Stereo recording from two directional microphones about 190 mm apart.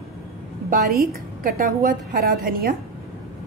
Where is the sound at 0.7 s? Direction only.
50° right (ahead or behind).